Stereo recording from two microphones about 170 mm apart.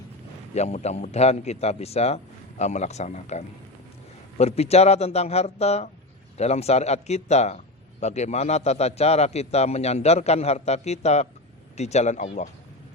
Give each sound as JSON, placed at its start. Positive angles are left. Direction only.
{"t": 0.5, "sound": "a man's voice", "side_deg": 40}